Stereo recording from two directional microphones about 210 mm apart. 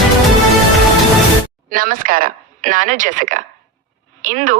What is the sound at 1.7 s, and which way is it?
A woman's voice, 40° right (ahead or behind).